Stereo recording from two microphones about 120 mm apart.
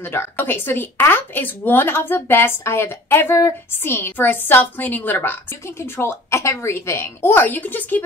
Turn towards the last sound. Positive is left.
turn(degrees=15)  # may be behind; listen again after turning